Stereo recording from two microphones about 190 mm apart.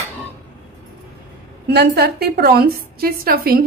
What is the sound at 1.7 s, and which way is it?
A woman's voice, 55° right (ahead or behind).